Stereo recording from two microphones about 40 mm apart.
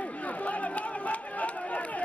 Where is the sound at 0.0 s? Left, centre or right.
Left.